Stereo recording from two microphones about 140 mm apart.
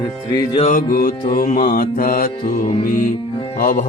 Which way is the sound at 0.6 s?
80° left.